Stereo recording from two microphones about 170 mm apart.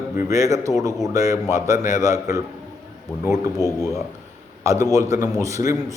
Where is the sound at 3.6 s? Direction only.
15° right (ahead or behind).